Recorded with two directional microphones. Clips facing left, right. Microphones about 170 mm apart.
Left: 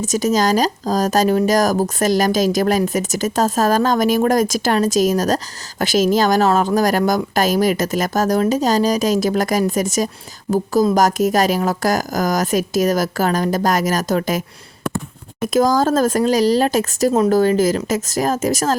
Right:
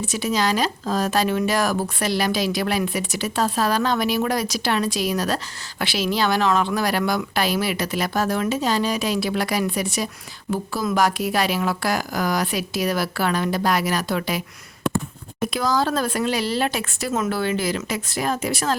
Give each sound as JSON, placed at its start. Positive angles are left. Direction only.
{"t": 0.0, "sound": "speech", "side_deg": 45}
{"t": 15.4, "sound": "speech", "side_deg": 45}